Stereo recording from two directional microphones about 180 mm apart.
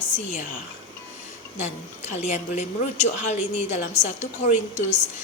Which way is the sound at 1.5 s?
40° left (ahead or behind).